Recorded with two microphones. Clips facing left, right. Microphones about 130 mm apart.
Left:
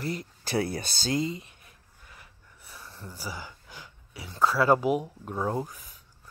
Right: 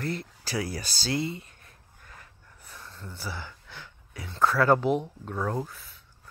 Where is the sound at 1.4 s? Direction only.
15° left (ahead or behind).